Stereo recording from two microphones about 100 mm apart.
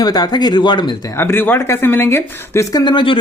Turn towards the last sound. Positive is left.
turn(degrees=50)  # may be behind; listen again after turning